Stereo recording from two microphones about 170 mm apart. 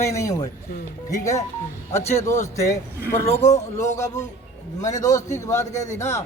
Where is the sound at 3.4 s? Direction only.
45° left (ahead or behind).